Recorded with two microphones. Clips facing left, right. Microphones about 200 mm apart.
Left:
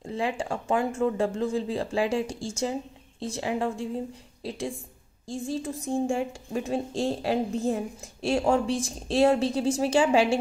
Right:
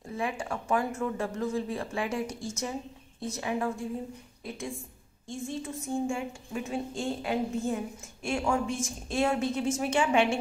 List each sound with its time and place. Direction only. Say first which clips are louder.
0.1 s a woman's voice: left 4 dB; 30° left (ahead or behind)